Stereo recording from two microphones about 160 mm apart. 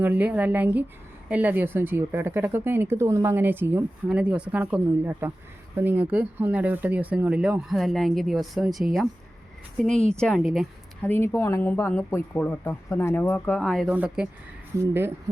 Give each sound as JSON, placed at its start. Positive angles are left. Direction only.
{"t": 0.0, "sound": "speech", "side_deg": -10}
{"t": 11.0, "sound": "speech", "side_deg": 10}
{"t": 13.9, "sound": "speech", "side_deg": -10}